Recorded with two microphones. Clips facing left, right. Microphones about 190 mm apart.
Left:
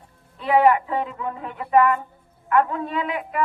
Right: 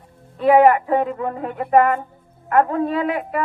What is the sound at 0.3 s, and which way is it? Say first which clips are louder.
Speech: right 5 dB; 50° right (ahead or behind).